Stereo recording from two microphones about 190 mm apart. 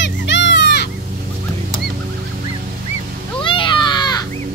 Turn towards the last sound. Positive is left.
turn(degrees=20)  # may be behind; listen again after turning